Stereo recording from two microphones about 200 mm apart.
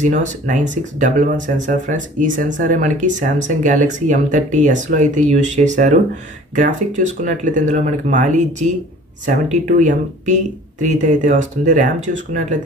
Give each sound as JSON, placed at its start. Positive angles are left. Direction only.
{"t": 0.0, "sound": "speech", "side_deg": -40}